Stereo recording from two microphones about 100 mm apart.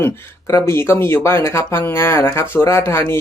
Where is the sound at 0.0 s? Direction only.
25° left (ahead or behind).